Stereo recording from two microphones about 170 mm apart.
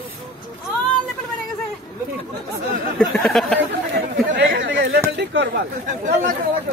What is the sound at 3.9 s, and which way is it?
Speech, 90° right.